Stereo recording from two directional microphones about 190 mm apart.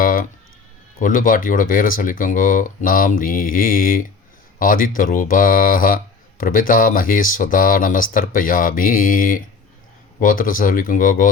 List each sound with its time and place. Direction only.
0.0 s music: 45° left (ahead or behind)
0.9 s speech: 45° left (ahead or behind)